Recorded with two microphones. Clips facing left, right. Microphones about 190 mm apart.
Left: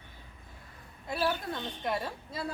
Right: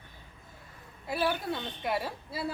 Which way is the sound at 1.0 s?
5° right (ahead or behind).